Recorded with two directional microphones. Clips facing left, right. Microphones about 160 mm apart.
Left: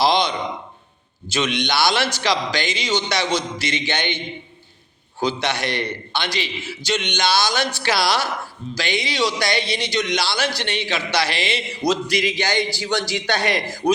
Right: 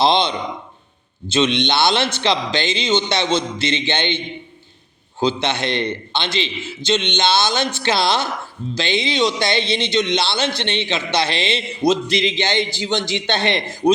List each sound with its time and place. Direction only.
0.0 s speech: 25° right (ahead or behind)
5.2 s speech: 25° right (ahead or behind)